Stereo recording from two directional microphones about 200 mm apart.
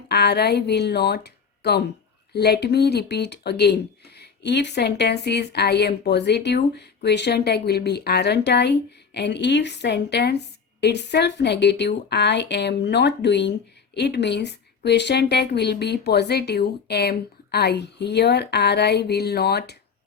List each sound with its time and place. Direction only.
0.1 s speech: 55° left (ahead or behind)